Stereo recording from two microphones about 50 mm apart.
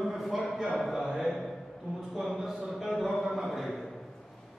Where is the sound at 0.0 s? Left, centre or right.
Centre.